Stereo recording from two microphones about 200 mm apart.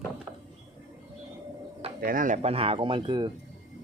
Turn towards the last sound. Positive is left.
turn(degrees=-25)  # may be behind; listen again after turning